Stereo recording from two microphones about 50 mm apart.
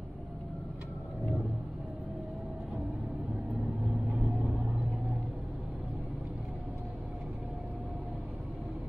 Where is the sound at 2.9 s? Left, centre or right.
Right.